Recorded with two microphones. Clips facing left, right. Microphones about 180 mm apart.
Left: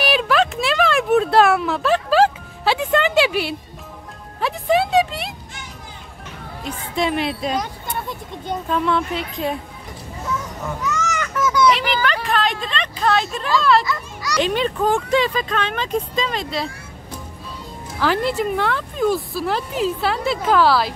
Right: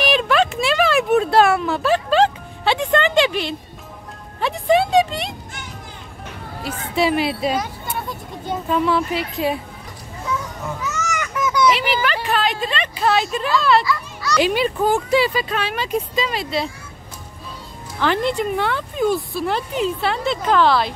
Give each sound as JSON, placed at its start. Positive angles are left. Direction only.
{"t": 0.0, "sound": "a sound", "side_deg": 0}
{"t": 4.4, "sound": "music", "side_deg": 0}
{"t": 6.6, "sound": "speech", "side_deg": -5}
{"t": 10.8, "sound": "children playing", "side_deg": -10}
{"t": 11.6, "sound": "speech", "side_deg": -5}
{"t": 13.8, "sound": "children playing", "side_deg": 15}
{"t": 14.4, "sound": "speech", "side_deg": -10}
{"t": 17.9, "sound": "speech", "side_deg": 5}